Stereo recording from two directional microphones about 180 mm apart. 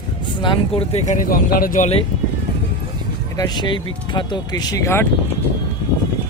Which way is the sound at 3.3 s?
25° left (ahead or behind).